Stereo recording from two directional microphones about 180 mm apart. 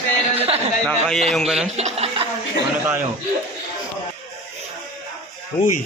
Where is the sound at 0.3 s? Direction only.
35° right (ahead or behind).